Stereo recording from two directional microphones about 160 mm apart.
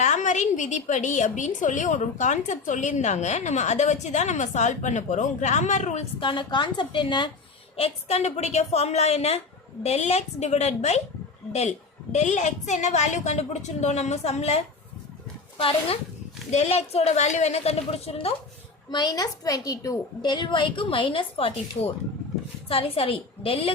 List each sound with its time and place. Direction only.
0.0 s a woman's voice: 50° left (ahead or behind)
6.1 s a woman's voice: 30° left (ahead or behind)
7.8 s a woman's voice: 40° left (ahead or behind)
12.1 s a woman's voice: 45° left (ahead or behind)
18.9 s a woman's voice: 25° left (ahead or behind)